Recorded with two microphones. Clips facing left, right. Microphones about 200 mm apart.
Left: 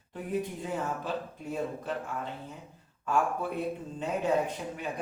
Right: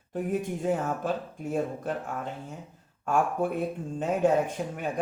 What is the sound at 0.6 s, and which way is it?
Speech, 50° right (ahead or behind).